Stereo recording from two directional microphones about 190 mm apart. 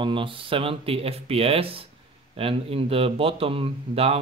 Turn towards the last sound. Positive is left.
turn(degrees=-30)  # may be behind; listen again after turning